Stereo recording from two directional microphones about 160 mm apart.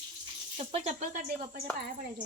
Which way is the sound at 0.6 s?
40° right (ahead or behind).